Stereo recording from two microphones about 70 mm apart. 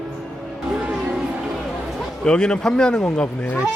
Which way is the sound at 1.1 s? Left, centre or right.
Centre.